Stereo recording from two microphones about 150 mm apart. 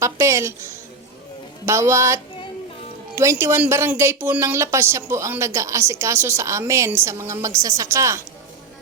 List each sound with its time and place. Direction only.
0.0 s a woman's voice: 20° right (ahead or behind)